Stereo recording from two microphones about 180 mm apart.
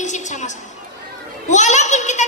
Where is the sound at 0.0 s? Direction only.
40° left (ahead or behind).